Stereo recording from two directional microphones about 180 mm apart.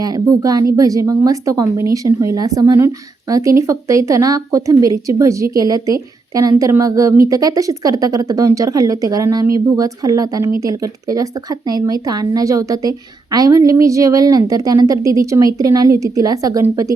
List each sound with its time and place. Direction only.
0.0 s speech: 20° right (ahead or behind)